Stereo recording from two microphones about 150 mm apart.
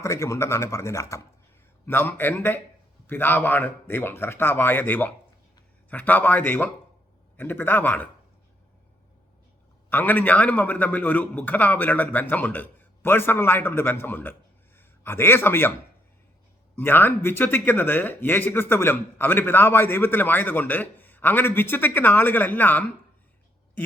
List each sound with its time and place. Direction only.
0.0 s speech: 20° left (ahead or behind)
9.9 s a man's voice: 10° left (ahead or behind)
16.7 s speech: 15° left (ahead or behind)